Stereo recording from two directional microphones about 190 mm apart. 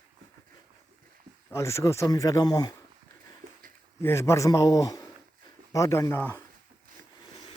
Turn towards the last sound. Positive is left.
turn(degrees=10)  # may be behind; listen again after turning